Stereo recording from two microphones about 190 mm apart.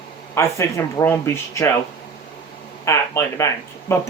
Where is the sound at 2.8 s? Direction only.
15° left (ahead or behind).